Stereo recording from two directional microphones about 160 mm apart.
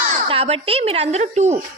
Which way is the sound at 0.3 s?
40° right (ahead or behind).